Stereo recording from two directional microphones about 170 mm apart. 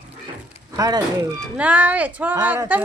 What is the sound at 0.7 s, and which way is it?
Speech, 25° right (ahead or behind).